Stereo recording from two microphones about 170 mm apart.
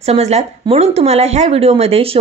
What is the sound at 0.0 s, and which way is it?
Speech, 40° right (ahead or behind).